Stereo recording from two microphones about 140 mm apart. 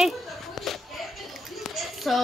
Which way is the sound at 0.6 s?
Centre (ahead or behind).